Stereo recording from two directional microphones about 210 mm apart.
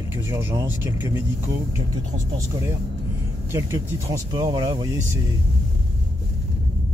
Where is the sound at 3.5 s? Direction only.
15° right (ahead or behind).